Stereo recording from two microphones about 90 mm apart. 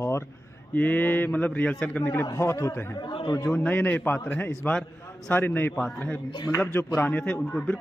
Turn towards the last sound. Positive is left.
turn(degrees=10)  # may be behind; listen again after turning